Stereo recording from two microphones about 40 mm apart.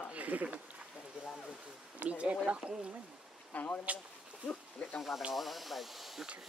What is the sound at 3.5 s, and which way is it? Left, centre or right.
Speech, left.